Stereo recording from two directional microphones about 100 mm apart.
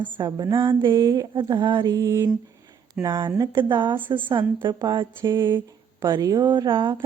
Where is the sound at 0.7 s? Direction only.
55° right (ahead or behind).